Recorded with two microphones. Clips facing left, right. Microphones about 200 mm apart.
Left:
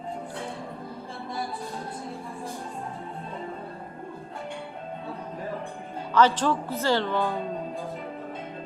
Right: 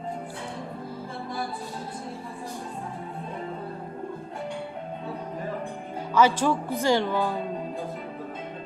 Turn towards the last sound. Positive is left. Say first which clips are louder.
# right 1 dB
turn(degrees=-10)  # may be behind; listen again after turning